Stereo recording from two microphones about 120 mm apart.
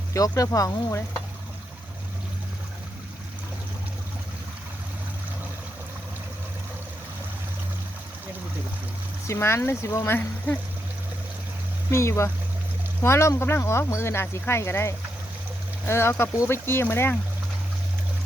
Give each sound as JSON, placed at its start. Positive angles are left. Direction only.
{"t": 0.1, "sound": "speech", "side_deg": 25}
{"t": 9.2, "sound": "speech", "side_deg": 20}
{"t": 11.9, "sound": "speech", "side_deg": 25}